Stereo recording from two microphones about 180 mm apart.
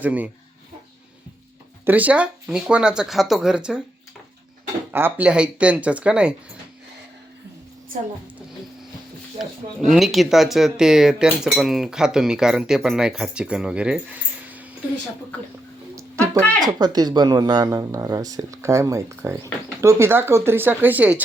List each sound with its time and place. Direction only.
0.0 s speech: 10° right (ahead or behind)
1.8 s speech: 10° right (ahead or behind)
4.9 s speech: 10° right (ahead or behind)
9.9 s speech: centre (ahead or behind)
16.0 s a sound: 15° right (ahead or behind)
16.6 s speech: 20° right (ahead or behind)